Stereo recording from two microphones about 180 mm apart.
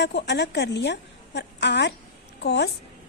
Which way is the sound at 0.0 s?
70° left (ahead or behind).